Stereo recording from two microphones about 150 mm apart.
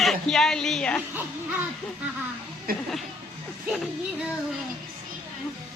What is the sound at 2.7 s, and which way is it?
Speech, 80° right.